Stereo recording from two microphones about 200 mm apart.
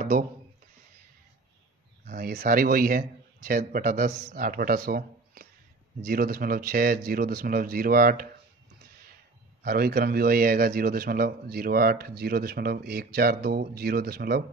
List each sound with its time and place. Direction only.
2.0 s a man's voice: 50° right (ahead or behind)
9.6 s a man's voice: 50° right (ahead or behind)